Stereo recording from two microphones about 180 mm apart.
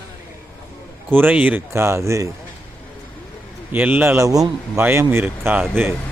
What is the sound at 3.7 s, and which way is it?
A man's voice, 10° right (ahead or behind).